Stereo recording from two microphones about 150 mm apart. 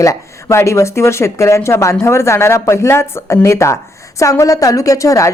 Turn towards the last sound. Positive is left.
turn(degrees=20)  # may be behind; listen again after turning